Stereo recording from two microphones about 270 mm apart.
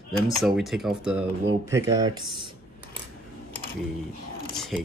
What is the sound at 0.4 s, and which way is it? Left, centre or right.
Speech, centre.